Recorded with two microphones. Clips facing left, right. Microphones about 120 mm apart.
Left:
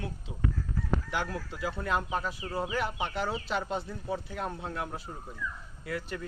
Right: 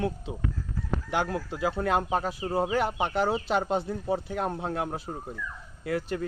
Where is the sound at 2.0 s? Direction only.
40° right (ahead or behind).